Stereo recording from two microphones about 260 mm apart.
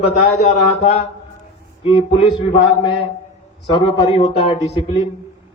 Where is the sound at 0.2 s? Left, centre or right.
Left.